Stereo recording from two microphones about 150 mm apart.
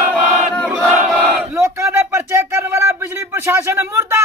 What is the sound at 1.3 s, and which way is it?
Battle cry, 20° right (ahead or behind).